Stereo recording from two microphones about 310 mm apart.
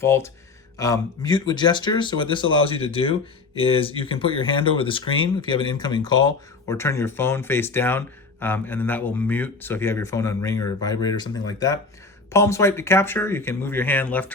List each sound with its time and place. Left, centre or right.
0.0 s speech: centre